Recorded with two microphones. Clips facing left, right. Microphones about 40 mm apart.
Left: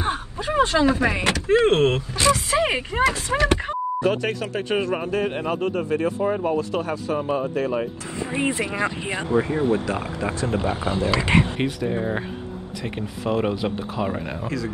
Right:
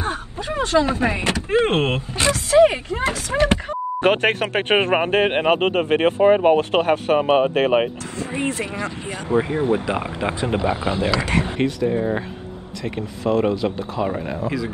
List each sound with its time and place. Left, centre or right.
0.0 s a sound: left
0.8 s speech: right
2.3 s speech: left
3.3 s speech: centre
4.0 s speech: right
8.5 s speech: left
9.4 s speech: right
11.6 s speech: centre